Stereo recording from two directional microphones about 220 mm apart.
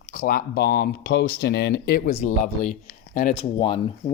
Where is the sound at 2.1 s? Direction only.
35° left (ahead or behind).